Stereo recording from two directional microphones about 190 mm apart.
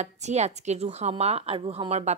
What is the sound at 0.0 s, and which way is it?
Speech, 35° right (ahead or behind).